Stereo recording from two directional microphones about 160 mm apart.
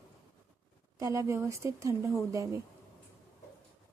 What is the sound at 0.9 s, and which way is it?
A woman's voice, 20° right (ahead or behind).